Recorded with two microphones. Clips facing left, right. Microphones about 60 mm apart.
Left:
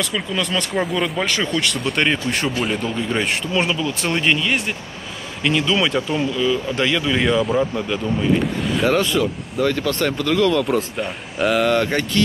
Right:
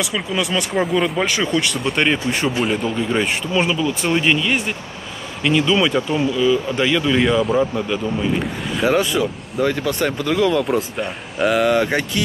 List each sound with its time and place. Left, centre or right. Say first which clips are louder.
0.0 s speech: right 1 dB; centre